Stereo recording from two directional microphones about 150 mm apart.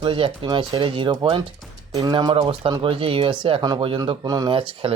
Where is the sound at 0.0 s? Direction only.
35° right (ahead or behind).